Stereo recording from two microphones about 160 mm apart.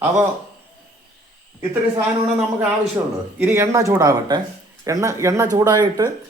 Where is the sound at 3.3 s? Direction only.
15° right (ahead or behind).